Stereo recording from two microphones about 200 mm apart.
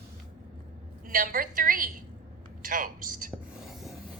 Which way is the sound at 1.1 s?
45° right (ahead or behind).